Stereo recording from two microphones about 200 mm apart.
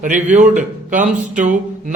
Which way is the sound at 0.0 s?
40° right (ahead or behind).